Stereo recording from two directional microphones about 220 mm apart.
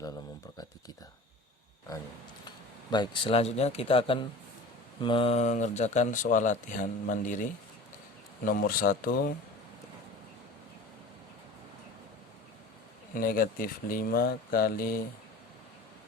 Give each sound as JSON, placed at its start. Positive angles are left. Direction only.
{"t": 1.9, "sound": "speech", "side_deg": 15}
{"t": 13.1, "sound": "speech", "side_deg": 40}